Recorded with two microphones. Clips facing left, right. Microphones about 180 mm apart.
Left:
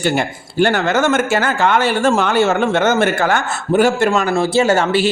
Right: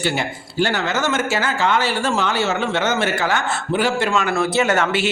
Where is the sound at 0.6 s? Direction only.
55° left (ahead or behind).